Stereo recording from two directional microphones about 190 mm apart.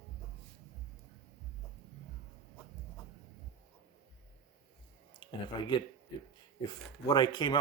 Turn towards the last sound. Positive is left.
turn(degrees=25)  # may be behind; listen again after turning